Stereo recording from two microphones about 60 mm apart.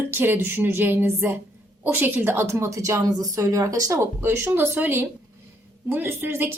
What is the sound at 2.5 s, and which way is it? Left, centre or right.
Speech, right.